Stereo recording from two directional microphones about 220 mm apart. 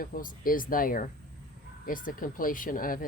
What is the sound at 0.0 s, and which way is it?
Speech, 40° left (ahead or behind).